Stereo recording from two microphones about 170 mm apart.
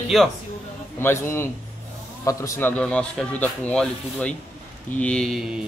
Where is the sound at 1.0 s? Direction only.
15° left (ahead or behind).